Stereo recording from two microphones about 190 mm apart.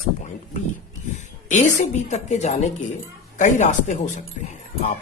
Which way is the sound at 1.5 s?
40° left (ahead or behind).